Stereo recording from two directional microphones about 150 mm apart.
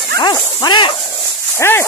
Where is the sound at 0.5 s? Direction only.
30° left (ahead or behind).